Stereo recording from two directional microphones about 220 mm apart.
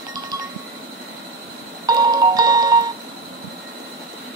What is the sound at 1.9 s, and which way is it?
Music, 15° right (ahead or behind).